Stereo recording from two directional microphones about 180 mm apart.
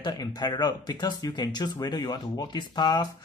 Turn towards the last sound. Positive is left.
turn(degrees=20)  # may be behind; listen again after turning